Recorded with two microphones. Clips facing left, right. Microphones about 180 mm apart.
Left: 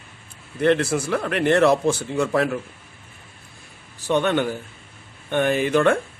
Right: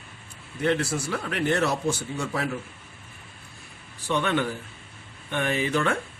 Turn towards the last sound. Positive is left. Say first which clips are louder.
# left 7 dB
turn(degrees=55)  # may be behind; listen again after turning